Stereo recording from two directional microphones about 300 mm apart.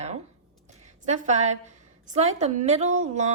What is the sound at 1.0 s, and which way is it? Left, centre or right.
Speech, right.